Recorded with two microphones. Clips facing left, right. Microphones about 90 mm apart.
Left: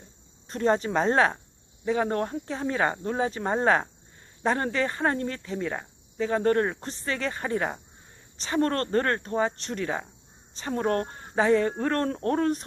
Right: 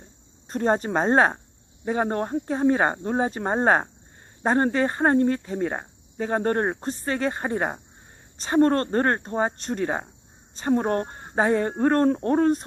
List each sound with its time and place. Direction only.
0.4 s speech: 40° right (ahead or behind)